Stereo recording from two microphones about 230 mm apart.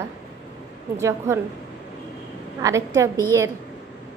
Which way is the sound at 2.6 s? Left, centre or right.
Centre.